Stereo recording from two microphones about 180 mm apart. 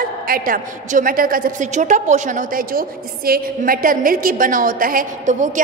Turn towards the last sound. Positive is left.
turn(degrees=-45)  # may be behind; listen again after turning